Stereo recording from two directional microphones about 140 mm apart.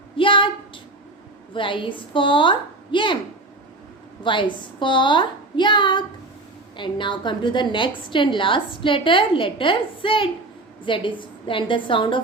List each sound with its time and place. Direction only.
0.2 s a sound: 35° left (ahead or behind)
1.5 s a woman's voice: 35° left (ahead or behind)
4.2 s a woman's voice: 35° left (ahead or behind)